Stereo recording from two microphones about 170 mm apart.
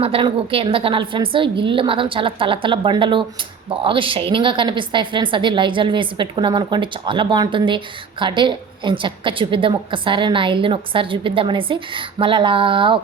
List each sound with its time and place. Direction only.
0.0 s a woman's voice: 30° right (ahead or behind)